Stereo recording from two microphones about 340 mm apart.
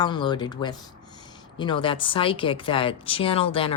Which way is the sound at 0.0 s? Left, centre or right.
Centre.